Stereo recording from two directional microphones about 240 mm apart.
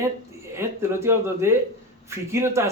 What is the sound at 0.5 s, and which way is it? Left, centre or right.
Speech, centre.